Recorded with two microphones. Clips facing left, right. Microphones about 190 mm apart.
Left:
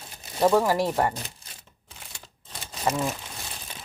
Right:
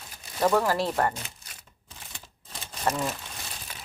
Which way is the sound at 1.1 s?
35° left (ahead or behind).